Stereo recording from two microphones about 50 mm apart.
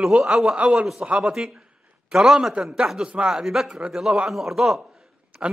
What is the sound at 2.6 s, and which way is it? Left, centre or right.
A man's voice, centre.